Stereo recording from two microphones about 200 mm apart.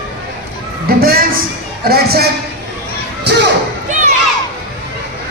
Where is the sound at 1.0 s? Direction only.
50° right (ahead or behind).